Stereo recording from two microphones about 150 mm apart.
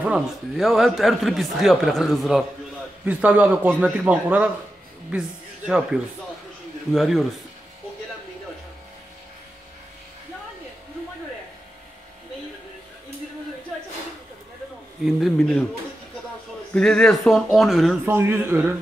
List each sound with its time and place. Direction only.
0.0 s a man's voice: 5° right (ahead or behind)
5.7 s a man's voice: 5° right (ahead or behind)
15.0 s a man's voice: centre (ahead or behind)
16.7 s a man's voice: 5° left (ahead or behind)
18.0 s a man's voice: 15° right (ahead or behind)